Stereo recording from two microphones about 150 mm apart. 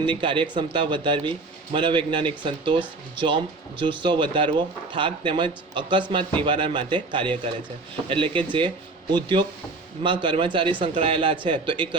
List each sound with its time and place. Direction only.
0.0 s speech: 35° right (ahead or behind)